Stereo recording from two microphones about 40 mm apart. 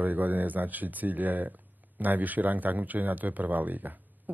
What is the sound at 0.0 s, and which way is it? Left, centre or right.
Speech, right.